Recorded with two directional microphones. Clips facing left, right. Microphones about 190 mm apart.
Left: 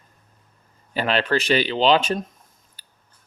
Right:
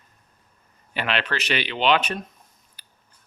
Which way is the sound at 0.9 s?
35° left (ahead or behind).